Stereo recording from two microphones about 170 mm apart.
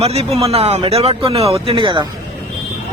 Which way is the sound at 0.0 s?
35° right (ahead or behind).